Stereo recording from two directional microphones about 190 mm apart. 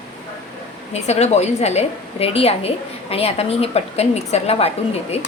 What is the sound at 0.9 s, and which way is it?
A woman's voice, 35° left (ahead or behind).